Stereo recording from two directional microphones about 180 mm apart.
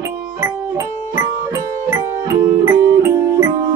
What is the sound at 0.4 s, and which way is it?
Music, 15° right (ahead or behind).